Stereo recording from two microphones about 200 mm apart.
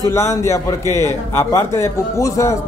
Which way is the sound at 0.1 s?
15° left (ahead or behind).